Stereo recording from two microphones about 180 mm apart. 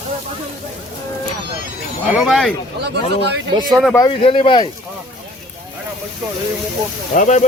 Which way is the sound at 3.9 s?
25° left (ahead or behind).